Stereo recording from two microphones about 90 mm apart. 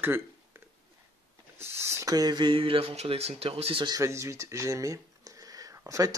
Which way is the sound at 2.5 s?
85° right.